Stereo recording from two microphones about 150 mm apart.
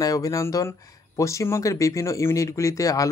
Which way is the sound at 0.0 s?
25° left (ahead or behind).